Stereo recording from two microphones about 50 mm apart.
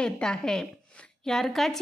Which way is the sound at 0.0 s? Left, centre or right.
Centre.